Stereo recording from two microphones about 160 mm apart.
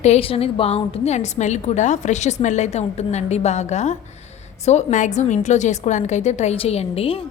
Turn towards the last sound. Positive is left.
turn(degrees=35)  # may be behind; listen again after turning